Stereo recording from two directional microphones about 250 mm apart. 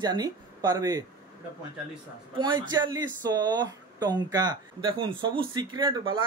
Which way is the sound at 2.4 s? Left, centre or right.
Centre.